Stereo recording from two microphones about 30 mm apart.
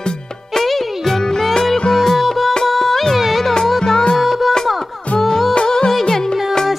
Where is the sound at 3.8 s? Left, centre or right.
Centre.